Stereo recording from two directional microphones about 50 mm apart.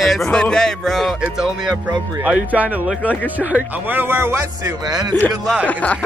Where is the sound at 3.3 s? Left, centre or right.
Right.